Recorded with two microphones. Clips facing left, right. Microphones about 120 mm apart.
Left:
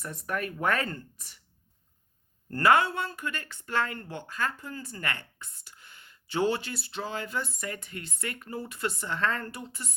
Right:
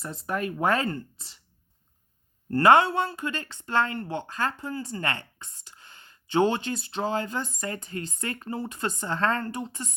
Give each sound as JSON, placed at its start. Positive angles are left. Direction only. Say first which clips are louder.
{"t": 0.0, "sound": "speech", "louder": "right 3 dB", "side_deg": -25}
{"t": 2.5, "sound": "a woman's voice", "louder": "right 4 dB", "side_deg": -25}
{"t": 8.4, "sound": "speech", "louder": "right 6 dB", "side_deg": -20}
{"t": 8.7, "sound": "a woman's voice", "louder": "right 3 dB", "side_deg": -35}